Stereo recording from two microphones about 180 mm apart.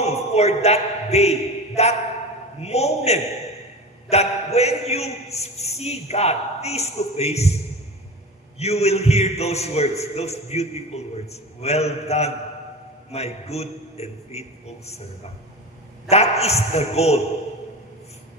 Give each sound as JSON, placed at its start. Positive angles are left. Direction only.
{"t": 0.0, "sound": "a man's voice", "side_deg": 35}
{"t": 8.5, "sound": "a man's voice", "side_deg": 35}
{"t": 16.1, "sound": "a man's voice", "side_deg": 35}